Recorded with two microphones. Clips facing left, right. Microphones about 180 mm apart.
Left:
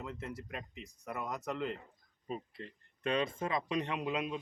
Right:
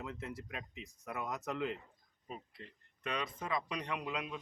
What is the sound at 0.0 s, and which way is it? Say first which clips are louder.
Speech: left 1 dB; centre (ahead or behind).